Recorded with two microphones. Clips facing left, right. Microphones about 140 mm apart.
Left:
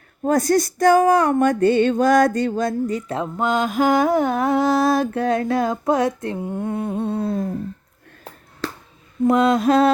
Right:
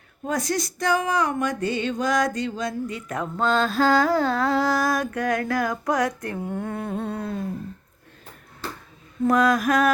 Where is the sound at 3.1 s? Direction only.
20° left (ahead or behind).